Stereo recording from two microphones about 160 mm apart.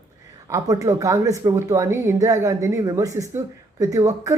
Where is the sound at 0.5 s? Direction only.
20° right (ahead or behind).